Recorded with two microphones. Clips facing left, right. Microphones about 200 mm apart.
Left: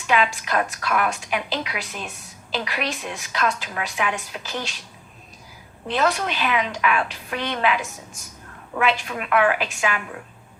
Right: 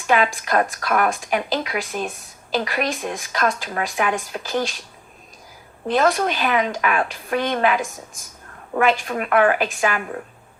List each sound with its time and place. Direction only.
0.1 s a woman's voice: 50° right (ahead or behind)
5.9 s a woman's voice: 45° right (ahead or behind)